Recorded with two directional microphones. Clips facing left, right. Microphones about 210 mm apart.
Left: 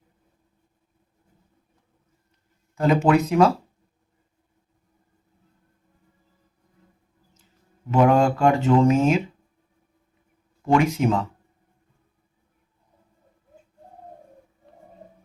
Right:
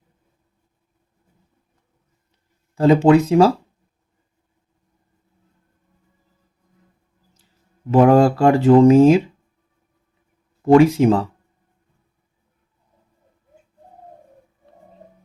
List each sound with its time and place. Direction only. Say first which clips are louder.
2.7 s speech: right 6 dB; 30° right (ahead or behind)
7.9 s speech: right 5 dB; 35° right (ahead or behind)
10.7 s speech: right 8 dB; 35° right (ahead or behind)